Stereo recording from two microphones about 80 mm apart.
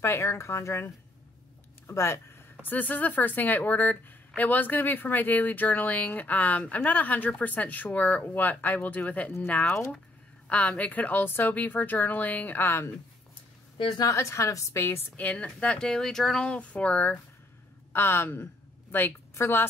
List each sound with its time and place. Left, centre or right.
0.0 s a woman's voice: left
2.6 s speech: left
14.0 s a woman's voice: left
15.1 s speech: centre
17.9 s a woman's voice: left